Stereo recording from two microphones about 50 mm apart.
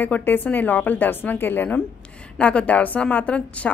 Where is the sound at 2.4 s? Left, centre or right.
Left.